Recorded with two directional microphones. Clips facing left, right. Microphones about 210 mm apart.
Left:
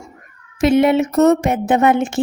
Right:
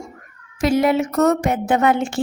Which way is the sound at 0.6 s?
25° left (ahead or behind).